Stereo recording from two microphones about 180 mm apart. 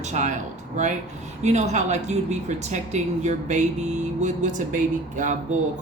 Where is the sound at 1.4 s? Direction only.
40° right (ahead or behind).